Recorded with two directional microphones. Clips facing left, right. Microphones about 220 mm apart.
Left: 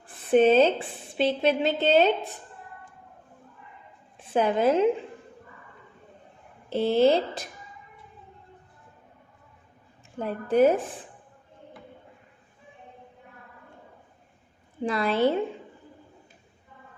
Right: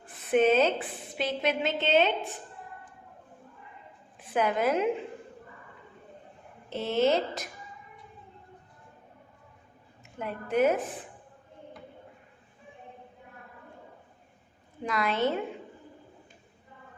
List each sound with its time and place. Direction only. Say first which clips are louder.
0.3 s a woman's voice: left 4 dB; 30° left (ahead or behind)
4.2 s a woman's voice: left 4 dB; 30° left (ahead or behind)
6.7 s a woman's voice: left 5 dB; 30° left (ahead or behind)
10.2 s a woman's voice: left 5 dB; 35° left (ahead or behind)
14.8 s a woman's voice: left 5 dB; 30° left (ahead or behind)